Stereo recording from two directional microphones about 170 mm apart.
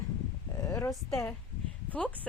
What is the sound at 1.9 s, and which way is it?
Speech, 10° left (ahead or behind).